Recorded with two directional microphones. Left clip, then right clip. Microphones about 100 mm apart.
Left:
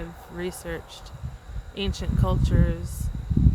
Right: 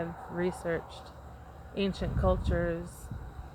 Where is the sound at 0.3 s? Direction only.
40° left (ahead or behind).